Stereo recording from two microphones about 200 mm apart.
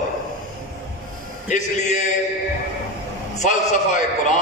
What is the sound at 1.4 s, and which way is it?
Music, 35° left (ahead or behind).